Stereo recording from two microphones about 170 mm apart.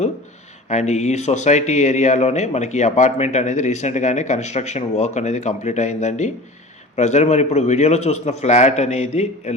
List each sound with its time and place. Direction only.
0.7 s a man's voice: 45° left (ahead or behind)